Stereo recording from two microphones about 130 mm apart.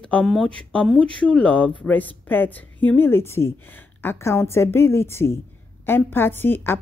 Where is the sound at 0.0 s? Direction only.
5° left (ahead or behind).